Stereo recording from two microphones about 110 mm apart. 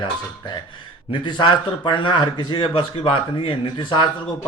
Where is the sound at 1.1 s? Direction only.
45° left (ahead or behind).